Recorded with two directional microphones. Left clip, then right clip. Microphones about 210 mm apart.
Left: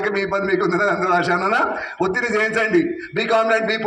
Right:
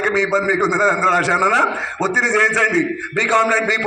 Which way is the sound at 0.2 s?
60° left (ahead or behind).